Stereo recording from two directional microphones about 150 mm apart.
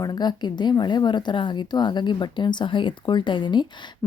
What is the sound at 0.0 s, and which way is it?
Speech, 25° left (ahead or behind).